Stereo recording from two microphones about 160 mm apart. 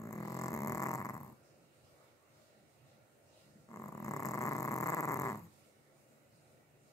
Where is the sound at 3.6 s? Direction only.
20° left (ahead or behind).